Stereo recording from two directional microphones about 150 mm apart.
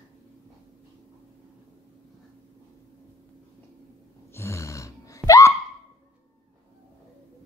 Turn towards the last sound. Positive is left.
turn(degrees=20)  # may be behind; listen again after turning